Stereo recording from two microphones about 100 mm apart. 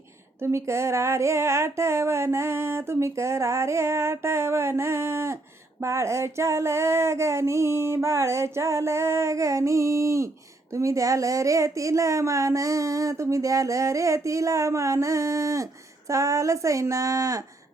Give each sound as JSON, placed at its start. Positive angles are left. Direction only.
{"t": 0.4, "sound": "female singing", "side_deg": -30}
{"t": 10.8, "sound": "speech", "side_deg": -30}